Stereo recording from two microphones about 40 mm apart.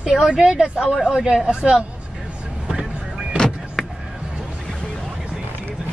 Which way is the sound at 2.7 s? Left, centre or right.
Centre.